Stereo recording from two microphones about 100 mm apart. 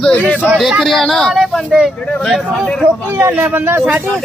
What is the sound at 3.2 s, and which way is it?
Speech, 15° right (ahead or behind).